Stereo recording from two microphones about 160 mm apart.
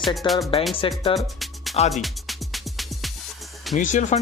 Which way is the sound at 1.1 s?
Centre (ahead or behind).